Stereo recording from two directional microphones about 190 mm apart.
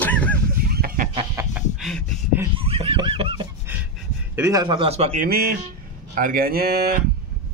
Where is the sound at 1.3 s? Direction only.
15° right (ahead or behind).